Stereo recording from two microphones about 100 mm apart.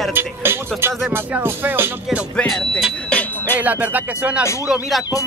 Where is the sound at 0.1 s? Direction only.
20° right (ahead or behind).